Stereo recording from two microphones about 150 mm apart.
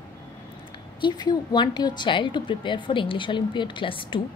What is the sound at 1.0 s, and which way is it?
A woman's voice, 30° left (ahead or behind).